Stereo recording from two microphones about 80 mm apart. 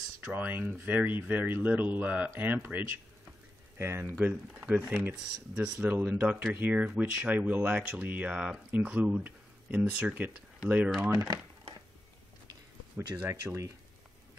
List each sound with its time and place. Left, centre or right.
0.2 s speech: right
4.2 s speech: centre
4.8 s speech: right
5.1 s speech: centre
5.8 s speech: right
11.0 s speech: right
12.9 s speech: right
13.3 s speech: right